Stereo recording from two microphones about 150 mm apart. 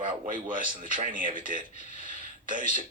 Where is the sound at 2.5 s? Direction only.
60° right (ahead or behind).